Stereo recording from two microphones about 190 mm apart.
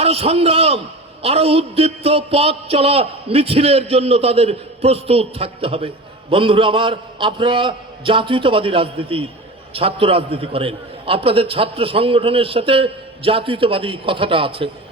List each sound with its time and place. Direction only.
0.0 s a man's voice: 35° right (ahead or behind)